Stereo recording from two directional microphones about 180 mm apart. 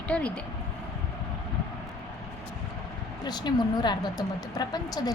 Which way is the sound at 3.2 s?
25° left (ahead or behind).